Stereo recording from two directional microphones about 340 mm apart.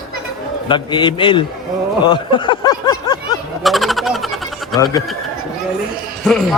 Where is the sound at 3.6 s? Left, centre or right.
Centre.